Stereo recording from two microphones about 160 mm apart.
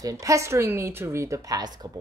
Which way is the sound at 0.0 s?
20° right (ahead or behind).